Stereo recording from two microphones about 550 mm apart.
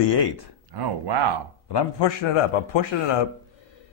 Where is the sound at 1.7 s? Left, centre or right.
Left.